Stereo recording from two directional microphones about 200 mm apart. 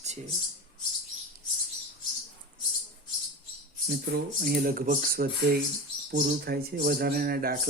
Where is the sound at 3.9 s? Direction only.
50° right (ahead or behind).